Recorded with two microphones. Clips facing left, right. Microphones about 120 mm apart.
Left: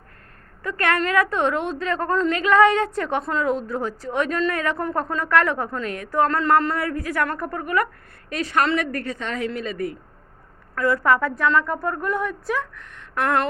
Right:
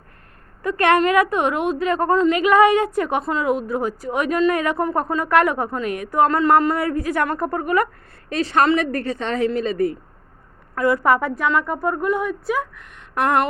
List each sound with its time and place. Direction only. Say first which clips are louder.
0.6 s a woman's voice: right 6 dB; 20° right (ahead or behind)
6.7 s a woman's voice: right 3 dB; 25° right (ahead or behind)
10.8 s a woman's voice: right 2 dB; 20° right (ahead or behind)